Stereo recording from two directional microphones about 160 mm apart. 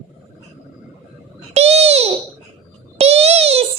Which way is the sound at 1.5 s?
40° right (ahead or behind).